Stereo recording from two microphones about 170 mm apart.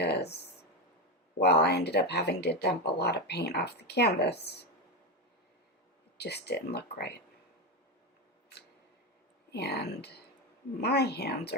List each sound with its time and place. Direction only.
0.0 s a sound: 75° left (ahead or behind)
1.4 s speech: 75° left (ahead or behind)
6.1 s speech: 75° left (ahead or behind)
9.5 s speech: 75° left (ahead or behind)